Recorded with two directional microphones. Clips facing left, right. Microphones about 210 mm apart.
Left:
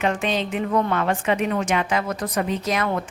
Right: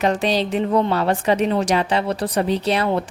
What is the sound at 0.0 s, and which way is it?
A woman's voice, 35° right (ahead or behind).